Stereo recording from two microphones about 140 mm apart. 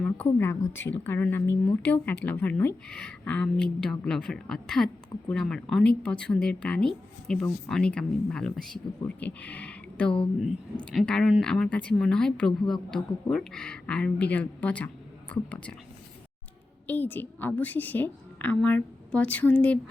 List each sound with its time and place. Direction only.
0.3 s speech: 15° left (ahead or behind)
16.8 s speech: 15° left (ahead or behind)